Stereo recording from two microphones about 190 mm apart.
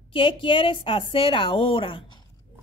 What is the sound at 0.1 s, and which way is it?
A woman's voice, 30° left (ahead or behind).